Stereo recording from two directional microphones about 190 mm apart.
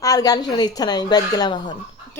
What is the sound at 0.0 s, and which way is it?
Speech, 20° left (ahead or behind).